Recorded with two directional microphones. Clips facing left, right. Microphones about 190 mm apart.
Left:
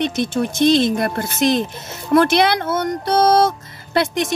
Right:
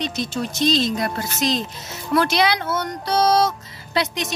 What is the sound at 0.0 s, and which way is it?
Speech, 55° left (ahead or behind).